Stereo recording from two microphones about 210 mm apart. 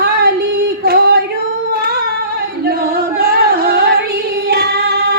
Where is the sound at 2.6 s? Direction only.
45° right (ahead or behind).